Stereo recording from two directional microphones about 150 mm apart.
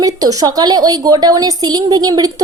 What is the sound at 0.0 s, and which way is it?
A woman's voice, 25° right (ahead or behind).